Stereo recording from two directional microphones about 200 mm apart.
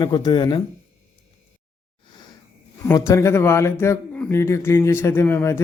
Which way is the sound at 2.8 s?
15° left (ahead or behind).